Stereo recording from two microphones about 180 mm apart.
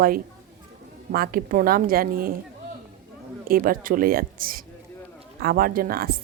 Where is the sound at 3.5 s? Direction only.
50° right (ahead or behind).